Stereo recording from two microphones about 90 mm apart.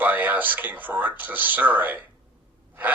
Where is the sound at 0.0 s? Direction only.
20° right (ahead or behind).